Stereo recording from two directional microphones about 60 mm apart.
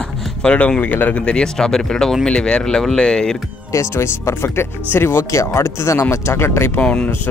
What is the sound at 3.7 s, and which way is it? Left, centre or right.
Speech, left.